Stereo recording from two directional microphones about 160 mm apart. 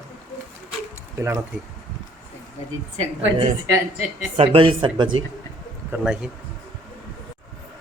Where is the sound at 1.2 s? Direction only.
20° right (ahead or behind).